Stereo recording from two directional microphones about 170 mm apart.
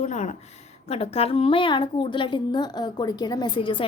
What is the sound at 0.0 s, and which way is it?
A woman's voice, 45° left (ahead or behind).